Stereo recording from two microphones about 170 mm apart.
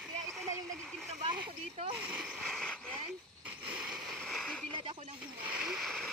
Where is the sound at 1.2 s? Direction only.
35° right (ahead or behind).